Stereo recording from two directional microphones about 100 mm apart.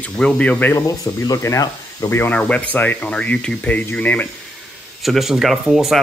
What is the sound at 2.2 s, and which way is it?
Speech, 15° left (ahead or behind).